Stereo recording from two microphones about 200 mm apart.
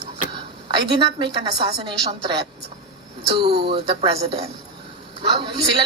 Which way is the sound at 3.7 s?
30° right (ahead or behind).